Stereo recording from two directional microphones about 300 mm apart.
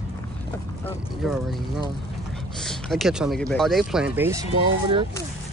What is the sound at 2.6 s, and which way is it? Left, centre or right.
Speech, centre.